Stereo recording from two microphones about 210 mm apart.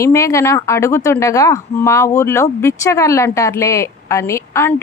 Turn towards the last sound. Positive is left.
turn(degrees=10)  # may be behind; listen again after turning